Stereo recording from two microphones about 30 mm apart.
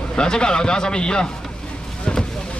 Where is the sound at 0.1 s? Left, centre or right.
Left.